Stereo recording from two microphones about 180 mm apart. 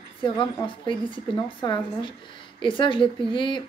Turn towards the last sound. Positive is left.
turn(degrees=25)  # may be behind; listen again after turning